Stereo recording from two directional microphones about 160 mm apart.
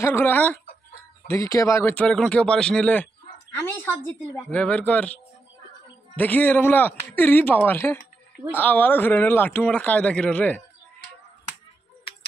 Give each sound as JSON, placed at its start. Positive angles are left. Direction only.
{"t": 0.0, "sound": "speech", "side_deg": 15}